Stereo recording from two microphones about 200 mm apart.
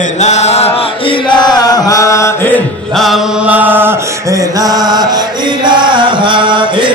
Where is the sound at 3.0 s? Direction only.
5° right (ahead or behind).